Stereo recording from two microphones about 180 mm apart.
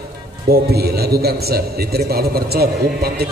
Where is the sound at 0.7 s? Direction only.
60° right (ahead or behind).